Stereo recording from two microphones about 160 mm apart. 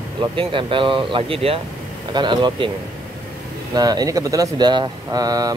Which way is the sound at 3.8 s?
25° right (ahead or behind).